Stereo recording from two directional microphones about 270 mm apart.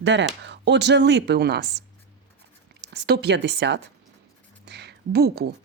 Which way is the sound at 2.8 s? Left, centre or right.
Right.